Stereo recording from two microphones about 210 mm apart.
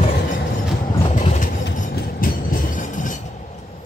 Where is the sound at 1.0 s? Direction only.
35° left (ahead or behind).